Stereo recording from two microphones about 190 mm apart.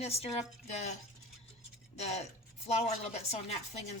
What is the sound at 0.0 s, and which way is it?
Speech, 35° left (ahead or behind).